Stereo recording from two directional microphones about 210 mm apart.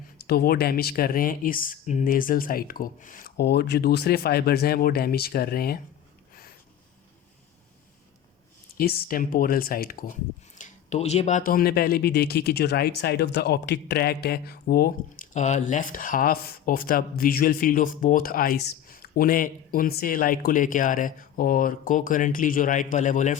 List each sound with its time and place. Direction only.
0.2 s speech: 50° left (ahead or behind)
8.8 s speech: 45° left (ahead or behind)
10.6 s speech: 35° left (ahead or behind)